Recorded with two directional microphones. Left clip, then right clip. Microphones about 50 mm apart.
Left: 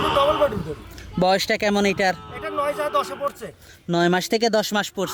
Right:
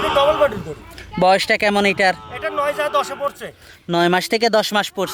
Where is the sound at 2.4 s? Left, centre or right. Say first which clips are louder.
Right 4 dB; right.